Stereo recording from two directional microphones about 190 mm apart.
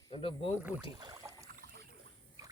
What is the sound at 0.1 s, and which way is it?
Speech, 25° left (ahead or behind).